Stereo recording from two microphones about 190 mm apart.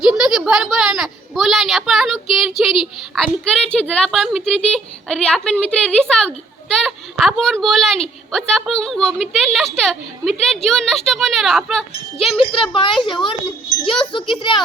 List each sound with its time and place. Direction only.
0.0 s a woman's voice: 5° right (ahead or behind)
12.7 s a woman's voice: 25° left (ahead or behind)